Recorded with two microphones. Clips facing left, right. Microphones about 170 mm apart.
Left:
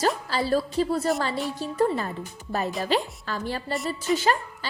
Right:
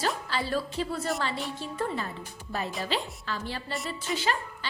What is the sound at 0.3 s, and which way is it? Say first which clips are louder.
A woman's voice: left 6 dB; 40° left (ahead or behind).